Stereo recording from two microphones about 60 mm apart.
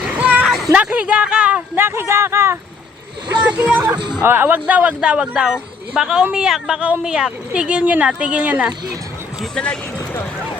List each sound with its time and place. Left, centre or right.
0.2 s a sound: right
0.7 s speech: right
1.7 s speech: right
3.4 s speech: centre
4.2 s speech: right